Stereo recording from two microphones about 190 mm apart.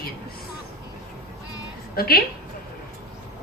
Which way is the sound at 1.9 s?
50° left (ahead or behind).